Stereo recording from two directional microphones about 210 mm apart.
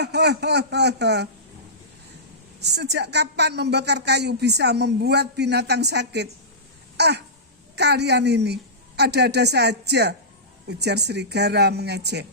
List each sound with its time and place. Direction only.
0.0 s a woman's voice: 55° right (ahead or behind)
2.6 s a woman's voice: 55° right (ahead or behind)
6.9 s throat clearing: 50° right (ahead or behind)
7.8 s a woman's voice: 55° right (ahead or behind)